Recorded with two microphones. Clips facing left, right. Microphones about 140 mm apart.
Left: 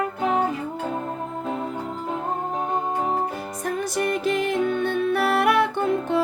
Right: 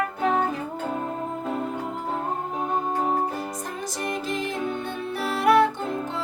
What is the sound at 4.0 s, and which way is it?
Music, 65° left (ahead or behind).